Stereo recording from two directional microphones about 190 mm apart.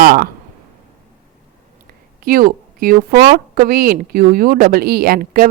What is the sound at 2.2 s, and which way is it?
A woman's voice, 50° right (ahead or behind).